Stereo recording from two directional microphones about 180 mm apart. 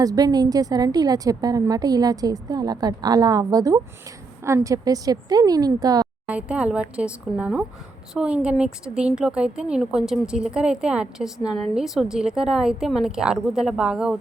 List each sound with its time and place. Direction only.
0.0 s a woman's voice: 20° right (ahead or behind)
6.2 s speech: 5° right (ahead or behind)